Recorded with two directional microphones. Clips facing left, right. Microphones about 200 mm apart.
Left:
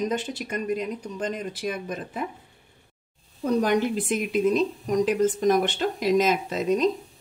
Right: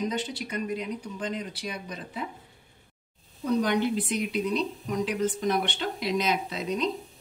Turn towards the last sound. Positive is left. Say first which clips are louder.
# left 7 dB
turn(degrees=45)  # may be behind; listen again after turning